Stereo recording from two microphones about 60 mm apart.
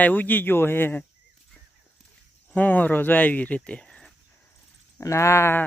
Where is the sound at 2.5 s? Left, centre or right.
Left.